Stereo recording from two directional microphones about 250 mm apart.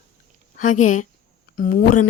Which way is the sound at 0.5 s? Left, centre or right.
Left.